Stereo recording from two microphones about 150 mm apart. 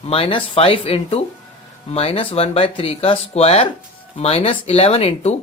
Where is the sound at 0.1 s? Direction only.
35° left (ahead or behind).